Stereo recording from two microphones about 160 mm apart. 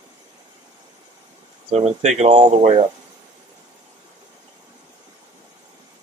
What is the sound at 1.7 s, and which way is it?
Speech, 45° right (ahead or behind).